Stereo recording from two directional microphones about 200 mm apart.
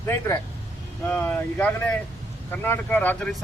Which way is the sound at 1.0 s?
10° left (ahead or behind).